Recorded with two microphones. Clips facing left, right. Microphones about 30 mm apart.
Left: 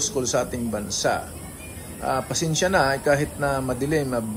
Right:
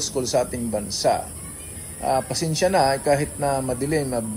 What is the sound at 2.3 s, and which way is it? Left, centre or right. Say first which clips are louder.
A man's voice: right 1 dB; right.